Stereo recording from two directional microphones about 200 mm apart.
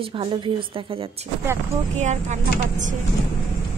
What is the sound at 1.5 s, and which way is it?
Speech, 10° right (ahead or behind).